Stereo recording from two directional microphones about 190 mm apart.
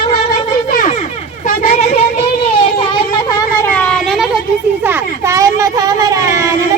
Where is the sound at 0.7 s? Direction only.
45° left (ahead or behind).